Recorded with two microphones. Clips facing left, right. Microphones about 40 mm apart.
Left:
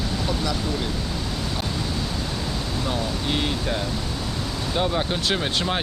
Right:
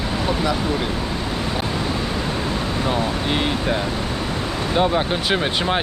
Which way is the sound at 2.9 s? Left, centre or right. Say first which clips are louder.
Right 4 dB; right.